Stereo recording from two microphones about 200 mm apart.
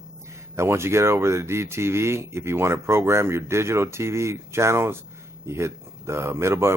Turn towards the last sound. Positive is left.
turn(degrees=-15)  # may be behind; listen again after turning